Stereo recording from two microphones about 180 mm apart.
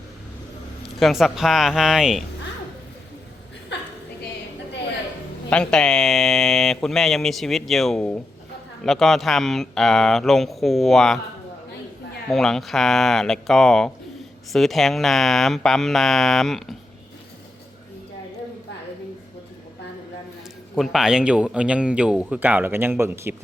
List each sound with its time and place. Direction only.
0.9 s speech: centre (ahead or behind)
3.7 s a sound: 75° left (ahead or behind)
5.5 s speech: 5° left (ahead or behind)
12.3 s speech: centre (ahead or behind)
20.7 s speech: centre (ahead or behind)